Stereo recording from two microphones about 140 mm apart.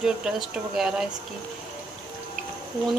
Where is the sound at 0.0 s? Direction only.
5° right (ahead or behind).